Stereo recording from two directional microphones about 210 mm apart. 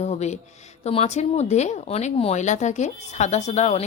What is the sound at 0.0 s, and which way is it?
A woman's voice, 30° left (ahead or behind).